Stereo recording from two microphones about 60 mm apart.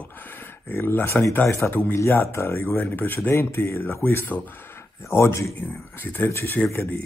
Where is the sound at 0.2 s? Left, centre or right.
Left.